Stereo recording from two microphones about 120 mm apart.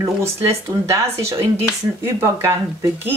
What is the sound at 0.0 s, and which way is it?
A woman's voice, 25° right (ahead or behind).